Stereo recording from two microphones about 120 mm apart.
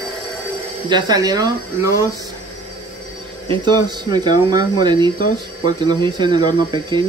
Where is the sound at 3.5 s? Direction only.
40° right (ahead or behind).